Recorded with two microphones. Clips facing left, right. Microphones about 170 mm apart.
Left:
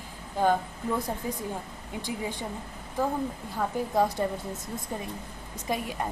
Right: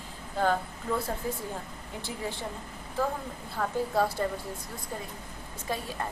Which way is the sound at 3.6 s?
15° left (ahead or behind).